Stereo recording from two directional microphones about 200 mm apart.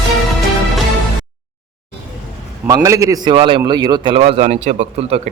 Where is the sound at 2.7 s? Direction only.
15° right (ahead or behind).